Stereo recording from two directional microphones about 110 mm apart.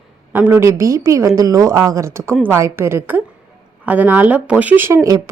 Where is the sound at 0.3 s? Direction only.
20° right (ahead or behind).